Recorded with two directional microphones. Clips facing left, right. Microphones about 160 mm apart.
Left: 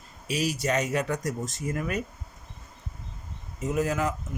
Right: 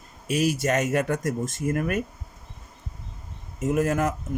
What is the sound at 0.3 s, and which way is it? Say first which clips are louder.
Speech: right 4 dB; 50° right (ahead or behind).